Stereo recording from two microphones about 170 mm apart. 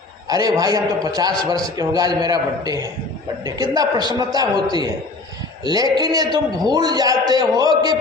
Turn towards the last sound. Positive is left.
turn(degrees=-25)  # may be behind; listen again after turning